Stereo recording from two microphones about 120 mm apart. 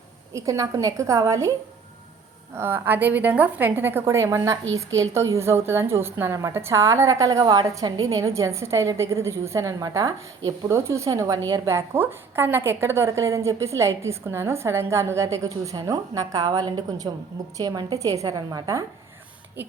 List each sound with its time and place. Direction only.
0.3 s a woman's voice: 30° right (ahead or behind)
2.6 s a woman's voice: 20° right (ahead or behind); by 18.8 s 35° right (ahead or behind)